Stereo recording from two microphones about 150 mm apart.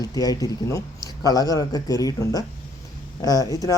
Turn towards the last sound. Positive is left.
turn(degrees=25)  # may be behind; listen again after turning